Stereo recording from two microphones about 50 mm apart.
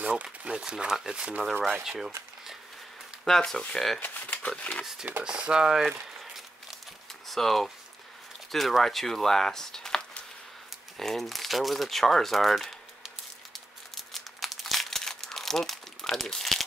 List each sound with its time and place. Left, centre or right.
0.0 s speech: right
0.6 s speech: centre
1.9 s speech: centre
3.3 s speech: centre
4.0 s speech: left
4.6 s speech: left
5.2 s speech: centre
7.2 s speech: centre
13.9 s crumpling: centre